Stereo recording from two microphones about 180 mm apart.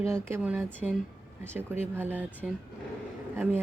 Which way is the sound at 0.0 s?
15° right (ahead or behind).